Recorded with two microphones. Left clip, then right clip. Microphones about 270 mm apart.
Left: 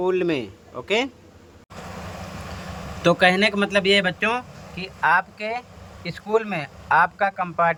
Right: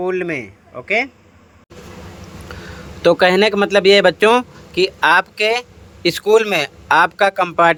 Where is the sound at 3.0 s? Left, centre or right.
Centre.